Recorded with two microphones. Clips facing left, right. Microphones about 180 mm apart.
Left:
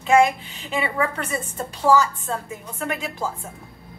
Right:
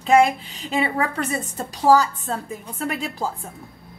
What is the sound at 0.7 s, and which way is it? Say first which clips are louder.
A woman's voice: right 1 dB; 40° right (ahead or behind).